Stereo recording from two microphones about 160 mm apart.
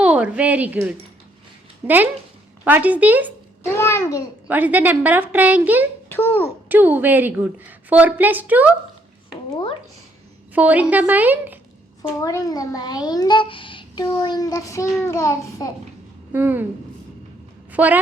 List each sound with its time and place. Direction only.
0.0 s a woman's voice: 10° right (ahead or behind)
3.8 s a child's voice: 15° left (ahead or behind)
4.4 s a woman's voice: 10° right (ahead or behind)
6.1 s a child's voice: 15° left (ahead or behind)
6.7 s a woman's voice: 10° right (ahead or behind)
9.5 s a child's voice: 30° left (ahead or behind)
10.5 s a woman's voice: 10° right (ahead or behind)
12.2 s a child's voice: 25° left (ahead or behind)
16.3 s a woman's voice: 10° right (ahead or behind)
17.7 s a woman's voice: 10° right (ahead or behind)